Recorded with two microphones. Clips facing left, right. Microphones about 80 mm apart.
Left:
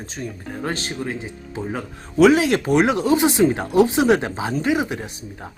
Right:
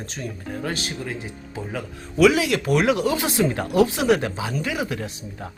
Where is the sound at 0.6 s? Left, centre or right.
Left.